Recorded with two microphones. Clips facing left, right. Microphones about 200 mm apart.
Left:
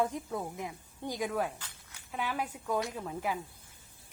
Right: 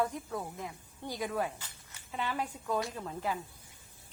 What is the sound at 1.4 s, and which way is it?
Speech, 5° right (ahead or behind).